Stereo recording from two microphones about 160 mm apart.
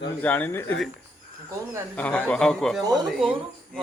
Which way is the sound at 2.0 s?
10° left (ahead or behind).